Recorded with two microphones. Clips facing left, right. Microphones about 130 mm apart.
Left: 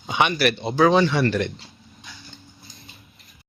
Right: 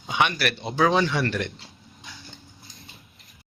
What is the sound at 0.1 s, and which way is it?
A man's voice, centre (ahead or behind).